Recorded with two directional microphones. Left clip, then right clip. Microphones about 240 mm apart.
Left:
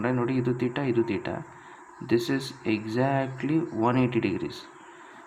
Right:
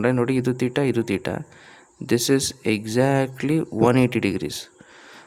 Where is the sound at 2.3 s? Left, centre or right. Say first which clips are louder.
Right 7 dB; right.